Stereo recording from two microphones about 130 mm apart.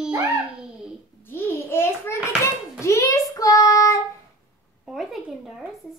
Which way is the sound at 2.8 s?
25° left (ahead or behind).